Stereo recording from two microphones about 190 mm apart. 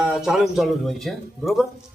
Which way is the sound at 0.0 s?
5° right (ahead or behind).